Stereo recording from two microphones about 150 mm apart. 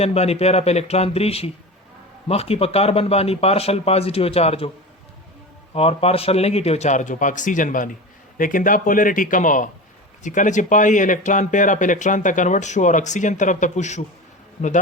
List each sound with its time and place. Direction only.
0.0 s speech: 45° left (ahead or behind)
5.7 s speech: 40° left (ahead or behind)